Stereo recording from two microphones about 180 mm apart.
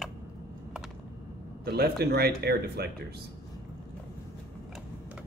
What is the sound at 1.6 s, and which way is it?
Speech, 65° right (ahead or behind).